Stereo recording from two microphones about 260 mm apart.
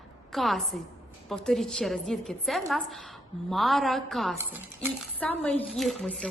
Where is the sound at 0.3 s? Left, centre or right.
Centre.